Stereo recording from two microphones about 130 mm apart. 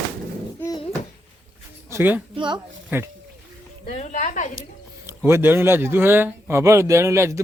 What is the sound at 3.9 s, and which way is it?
Speech, 60° left (ahead or behind).